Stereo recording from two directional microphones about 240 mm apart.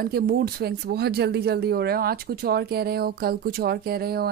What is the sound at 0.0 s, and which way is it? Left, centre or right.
Speech, right.